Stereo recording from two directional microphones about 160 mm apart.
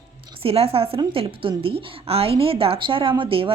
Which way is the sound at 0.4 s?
35° right (ahead or behind).